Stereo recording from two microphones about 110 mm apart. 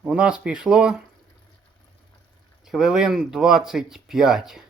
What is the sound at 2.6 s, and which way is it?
Speech, 5° right (ahead or behind).